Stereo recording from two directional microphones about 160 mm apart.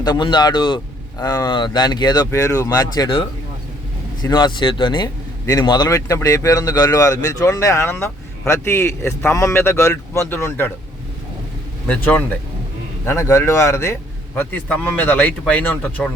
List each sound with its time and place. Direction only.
0.0 s speech: 25° left (ahead or behind)
13.1 s a man's voice: 15° left (ahead or behind)